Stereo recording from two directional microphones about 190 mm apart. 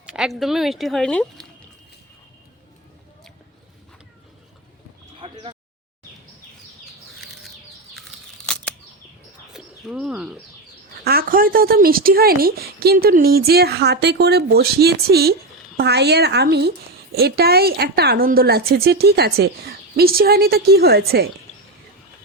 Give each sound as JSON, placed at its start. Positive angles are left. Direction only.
{"t": 0.0, "sound": "a woman's voice", "side_deg": -5}
{"t": 5.2, "sound": "a sound", "side_deg": -30}
{"t": 9.5, "sound": "bird", "side_deg": -5}
{"t": 11.0, "sound": "a woman's voice", "side_deg": -50}